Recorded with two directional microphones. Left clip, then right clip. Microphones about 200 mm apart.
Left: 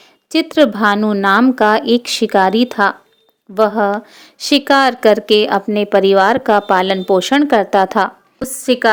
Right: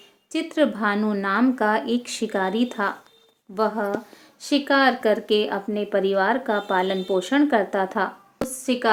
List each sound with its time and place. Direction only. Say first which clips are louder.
0.3 s speech: left 10 dB; 45° left (ahead or behind)